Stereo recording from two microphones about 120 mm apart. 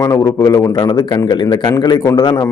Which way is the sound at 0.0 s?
30° left (ahead or behind).